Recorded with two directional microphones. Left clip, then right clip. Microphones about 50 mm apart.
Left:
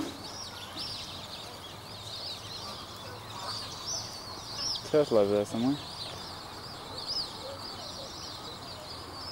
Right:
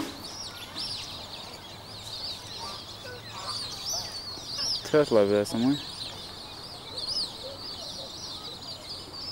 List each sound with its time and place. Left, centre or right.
0.7 s fowl: right
3.4 s goose: right
4.5 s speech: right
7.0 s bird: right